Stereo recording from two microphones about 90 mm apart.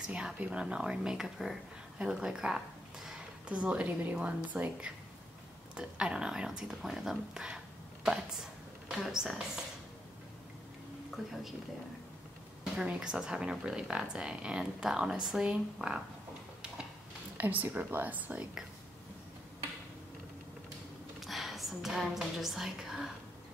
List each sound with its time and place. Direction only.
0.0 s speech: 10° right (ahead or behind)
11.1 s speech: 5° right (ahead or behind)
12.7 s speech: 10° right (ahead or behind)
17.4 s speech: 20° right (ahead or behind)
21.2 s a woman's voice: centre (ahead or behind)